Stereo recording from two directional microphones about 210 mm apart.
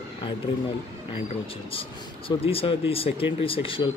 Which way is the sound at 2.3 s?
25° left (ahead or behind).